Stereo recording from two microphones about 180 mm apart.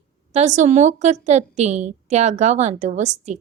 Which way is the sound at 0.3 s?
40° right (ahead or behind).